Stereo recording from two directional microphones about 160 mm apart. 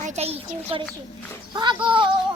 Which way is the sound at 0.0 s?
45° right (ahead or behind).